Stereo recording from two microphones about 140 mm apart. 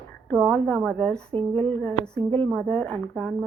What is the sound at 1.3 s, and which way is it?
Speech, 40° right (ahead or behind).